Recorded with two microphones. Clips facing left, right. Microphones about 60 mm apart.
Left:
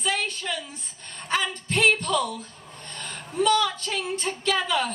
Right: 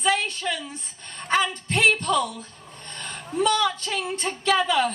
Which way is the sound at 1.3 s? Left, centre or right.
Right.